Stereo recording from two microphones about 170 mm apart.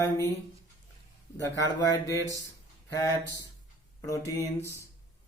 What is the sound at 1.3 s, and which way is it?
Speech, 15° left (ahead or behind).